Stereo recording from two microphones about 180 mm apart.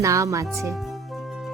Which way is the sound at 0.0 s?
20° right (ahead or behind).